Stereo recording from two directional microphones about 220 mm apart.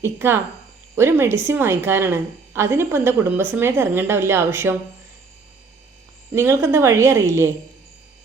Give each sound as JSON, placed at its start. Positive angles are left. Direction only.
{"t": 0.0, "sound": "a woman's voice", "side_deg": -10}
{"t": 6.3, "sound": "a woman's voice", "side_deg": -10}